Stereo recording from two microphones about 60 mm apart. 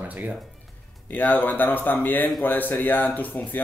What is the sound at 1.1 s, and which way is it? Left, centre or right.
Speech, left.